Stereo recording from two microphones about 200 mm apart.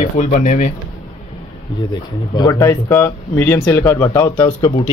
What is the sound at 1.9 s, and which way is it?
Speech, 20° left (ahead or behind).